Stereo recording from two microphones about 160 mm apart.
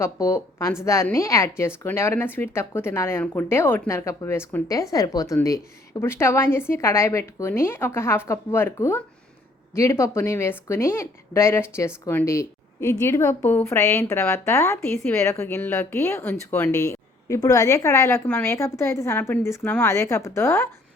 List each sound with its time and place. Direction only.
0.0 s speech: 20° left (ahead or behind)